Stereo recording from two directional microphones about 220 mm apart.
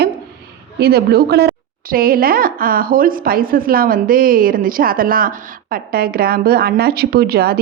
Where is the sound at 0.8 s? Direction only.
45° right (ahead or behind).